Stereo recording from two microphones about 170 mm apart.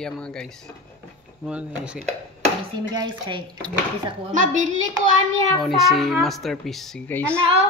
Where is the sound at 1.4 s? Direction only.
5° right (ahead or behind).